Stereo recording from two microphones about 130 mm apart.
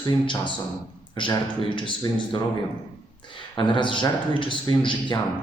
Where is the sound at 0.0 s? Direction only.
35° left (ahead or behind).